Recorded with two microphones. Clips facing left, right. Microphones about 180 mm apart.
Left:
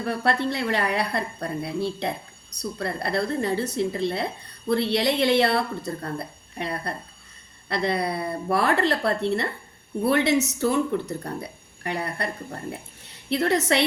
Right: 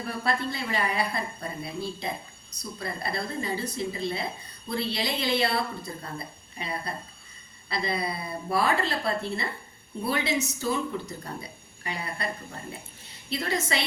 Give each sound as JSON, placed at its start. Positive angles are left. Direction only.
{"t": 0.0, "sound": "speech", "side_deg": 70}